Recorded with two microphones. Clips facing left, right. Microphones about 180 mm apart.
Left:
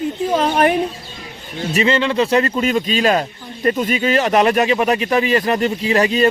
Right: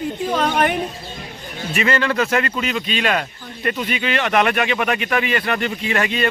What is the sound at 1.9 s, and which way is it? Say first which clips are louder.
A man's voice: left 3 dB; 20° left (ahead or behind).